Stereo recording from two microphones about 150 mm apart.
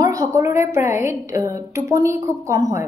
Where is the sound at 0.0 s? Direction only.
20° right (ahead or behind).